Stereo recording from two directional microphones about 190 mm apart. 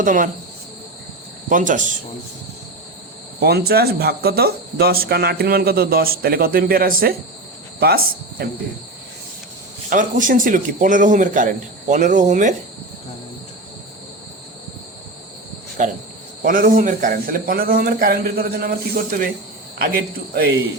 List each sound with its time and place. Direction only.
0.0 s speech: 45° right (ahead or behind)
1.5 s speech: 45° right (ahead or behind)
3.4 s speech: 55° right (ahead or behind)
9.9 s speech: 45° right (ahead or behind)
15.8 s insect: 40° right (ahead or behind)
16.4 s speech: 50° right (ahead or behind)
20.3 s speech: 55° right (ahead or behind)